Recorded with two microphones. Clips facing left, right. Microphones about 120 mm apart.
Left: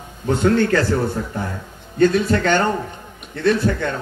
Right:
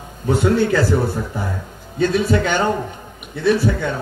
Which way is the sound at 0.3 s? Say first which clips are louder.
Even; 10° right (ahead or behind).